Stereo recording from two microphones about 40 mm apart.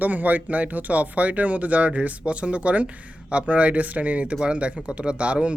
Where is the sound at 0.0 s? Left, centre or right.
Right.